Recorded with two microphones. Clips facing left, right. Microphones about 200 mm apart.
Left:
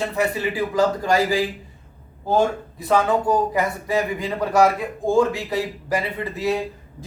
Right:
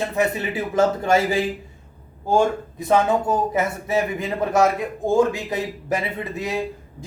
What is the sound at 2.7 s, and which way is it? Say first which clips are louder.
Speech: even; 20° right (ahead or behind).